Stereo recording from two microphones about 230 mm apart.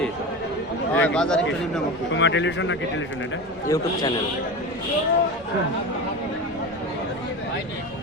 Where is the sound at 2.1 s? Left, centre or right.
Left.